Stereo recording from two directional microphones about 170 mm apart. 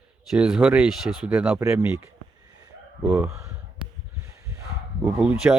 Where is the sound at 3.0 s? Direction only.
5° right (ahead or behind).